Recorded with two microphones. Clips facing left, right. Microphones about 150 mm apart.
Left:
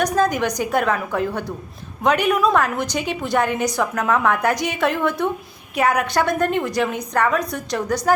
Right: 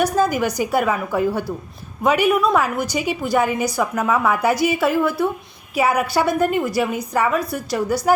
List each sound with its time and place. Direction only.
0.0 s a woman's voice: 5° right (ahead or behind)